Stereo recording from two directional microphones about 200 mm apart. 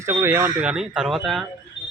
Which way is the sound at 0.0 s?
15° right (ahead or behind).